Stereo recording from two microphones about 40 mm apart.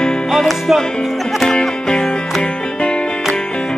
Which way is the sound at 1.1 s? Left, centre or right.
Centre.